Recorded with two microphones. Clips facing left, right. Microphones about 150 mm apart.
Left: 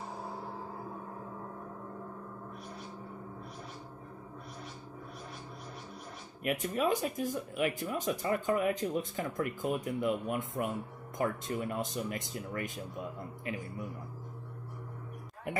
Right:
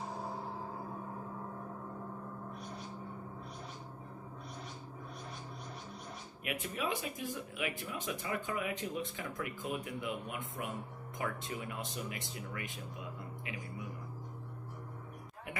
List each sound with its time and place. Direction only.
6.4 s speech: 40° left (ahead or behind)